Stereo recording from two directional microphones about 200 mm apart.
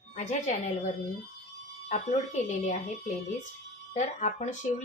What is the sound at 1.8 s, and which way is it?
Speech, 35° left (ahead or behind).